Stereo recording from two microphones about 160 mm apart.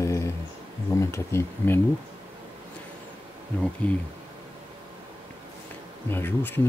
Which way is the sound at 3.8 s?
10° left (ahead or behind).